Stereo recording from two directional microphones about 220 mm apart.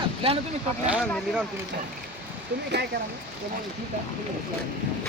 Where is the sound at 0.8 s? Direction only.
5° right (ahead or behind).